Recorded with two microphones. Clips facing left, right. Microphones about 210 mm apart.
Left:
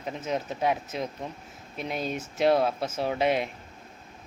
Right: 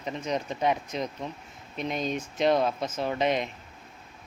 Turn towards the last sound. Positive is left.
turn(degrees=10)  # may be behind; listen again after turning